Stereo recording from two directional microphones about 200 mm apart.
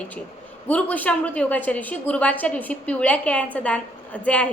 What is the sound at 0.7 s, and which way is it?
A woman's voice, 10° left (ahead or behind).